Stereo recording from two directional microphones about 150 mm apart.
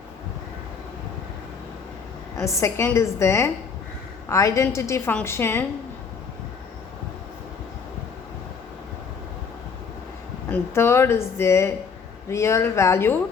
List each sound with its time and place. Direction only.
2.3 s a woman's voice: 20° left (ahead or behind)
10.5 s a woman's voice: 15° left (ahead or behind)